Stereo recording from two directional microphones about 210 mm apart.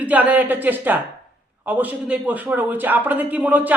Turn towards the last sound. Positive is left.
turn(degrees=-10)  # may be behind; listen again after turning